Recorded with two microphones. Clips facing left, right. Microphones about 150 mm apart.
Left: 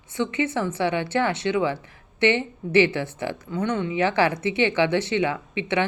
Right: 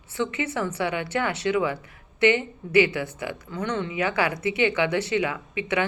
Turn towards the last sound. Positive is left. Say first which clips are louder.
# left 2 dB
turn(degrees=25)  # may be behind; listen again after turning